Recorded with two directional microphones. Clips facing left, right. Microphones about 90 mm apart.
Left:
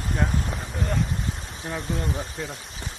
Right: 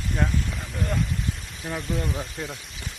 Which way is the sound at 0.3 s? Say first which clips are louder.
Left 1 dB; 40° left (ahead or behind).